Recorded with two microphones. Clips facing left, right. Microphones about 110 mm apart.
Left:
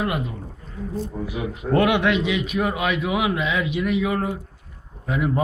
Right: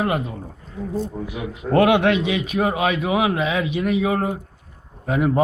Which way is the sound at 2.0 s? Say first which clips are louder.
Right 2 dB; 45° right (ahead or behind).